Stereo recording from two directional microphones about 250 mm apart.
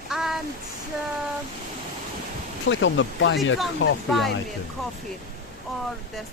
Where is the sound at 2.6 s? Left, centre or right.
Left.